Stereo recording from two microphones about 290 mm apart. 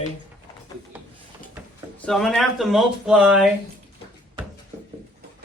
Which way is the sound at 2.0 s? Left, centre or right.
Centre.